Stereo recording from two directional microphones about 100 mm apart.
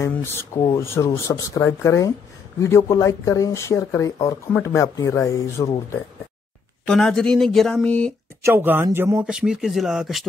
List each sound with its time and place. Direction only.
0.1 s speech: 25° left (ahead or behind)
6.9 s speech: 5° left (ahead or behind)
8.4 s speech: 25° right (ahead or behind)
9.2 s speech: 5° right (ahead or behind)